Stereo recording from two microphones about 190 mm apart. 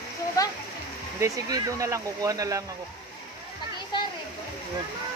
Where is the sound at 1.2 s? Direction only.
20° right (ahead or behind).